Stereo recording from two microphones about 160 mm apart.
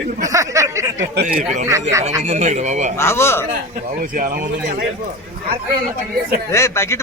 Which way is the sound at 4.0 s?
60° right (ahead or behind).